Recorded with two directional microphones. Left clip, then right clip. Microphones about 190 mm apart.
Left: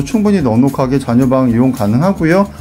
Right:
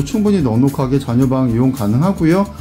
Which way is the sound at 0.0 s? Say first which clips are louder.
Left 3 dB; 15° left (ahead or behind).